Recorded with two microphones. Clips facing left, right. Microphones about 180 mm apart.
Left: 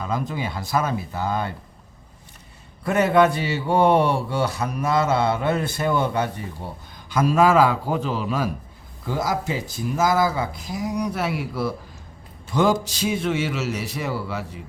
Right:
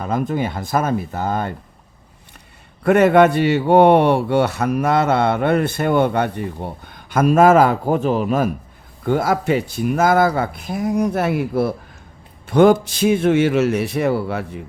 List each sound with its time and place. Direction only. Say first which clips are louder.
0.0 s speech: right 6 dB; 55° right (ahead or behind)
2.8 s a man's voice: right 6 dB; 65° right (ahead or behind)